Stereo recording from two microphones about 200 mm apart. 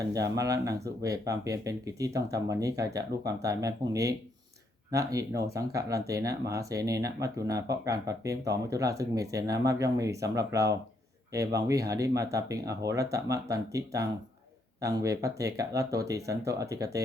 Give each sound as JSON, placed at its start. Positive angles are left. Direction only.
{"t": 0.1, "sound": "speech", "side_deg": -15}